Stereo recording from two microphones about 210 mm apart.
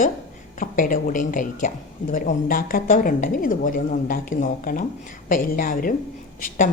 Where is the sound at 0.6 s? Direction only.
40° left (ahead or behind).